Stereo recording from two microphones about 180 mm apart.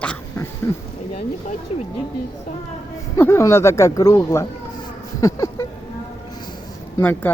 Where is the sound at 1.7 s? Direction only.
35° left (ahead or behind).